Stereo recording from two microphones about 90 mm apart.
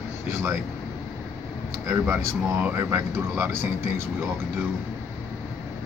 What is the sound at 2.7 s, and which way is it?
Speech, 30° right (ahead or behind).